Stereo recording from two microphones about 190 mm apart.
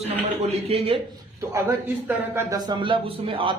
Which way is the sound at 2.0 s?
15° right (ahead or behind).